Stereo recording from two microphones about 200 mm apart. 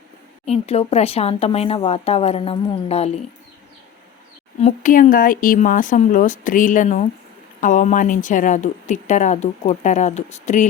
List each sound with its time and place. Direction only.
0.4 s speech: 30° left (ahead or behind)
4.6 s speech: 40° left (ahead or behind)